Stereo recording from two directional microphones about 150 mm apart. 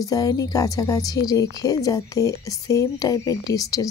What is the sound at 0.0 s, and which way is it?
Speech, 25° left (ahead or behind).